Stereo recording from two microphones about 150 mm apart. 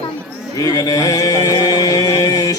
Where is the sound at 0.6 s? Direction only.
25° left (ahead or behind).